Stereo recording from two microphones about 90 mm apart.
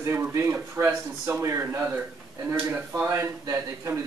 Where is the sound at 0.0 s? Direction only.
30° right (ahead or behind).